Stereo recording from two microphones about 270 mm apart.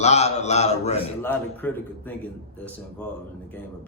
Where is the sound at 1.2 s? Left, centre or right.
Centre.